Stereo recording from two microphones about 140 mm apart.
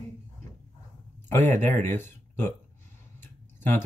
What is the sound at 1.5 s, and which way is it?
Speech, 15° left (ahead or behind).